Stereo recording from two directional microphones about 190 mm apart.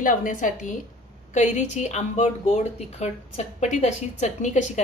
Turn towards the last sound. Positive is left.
turn(degrees=40)  # may be behind; listen again after turning